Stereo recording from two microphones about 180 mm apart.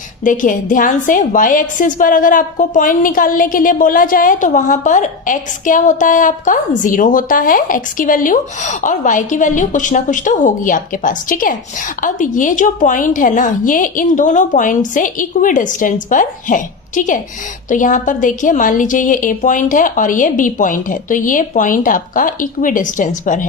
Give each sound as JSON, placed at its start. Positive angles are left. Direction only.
{"t": 0.3, "sound": "a woman's voice", "side_deg": 45}